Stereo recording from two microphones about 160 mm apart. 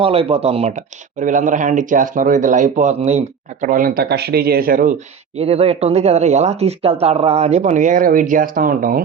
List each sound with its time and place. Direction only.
0.0 s speech: 35° right (ahead or behind); by 4.9 s 60° right (ahead or behind)
5.4 s speech: 40° right (ahead or behind); by 9.0 s 60° right (ahead or behind)